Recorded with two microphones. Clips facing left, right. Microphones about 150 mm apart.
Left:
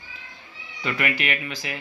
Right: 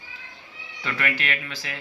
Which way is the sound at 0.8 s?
15° left (ahead or behind).